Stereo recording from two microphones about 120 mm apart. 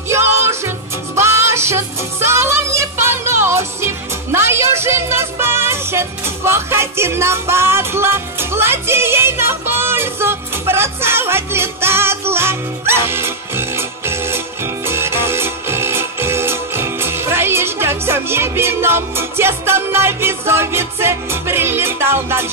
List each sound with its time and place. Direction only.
0.1 s music: 20° right (ahead or behind)